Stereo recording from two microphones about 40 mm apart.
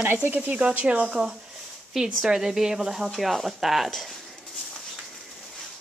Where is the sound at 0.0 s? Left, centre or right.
Right.